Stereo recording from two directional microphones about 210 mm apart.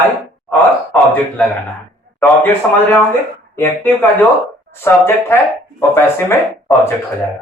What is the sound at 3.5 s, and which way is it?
A man's voice, 10° left (ahead or behind).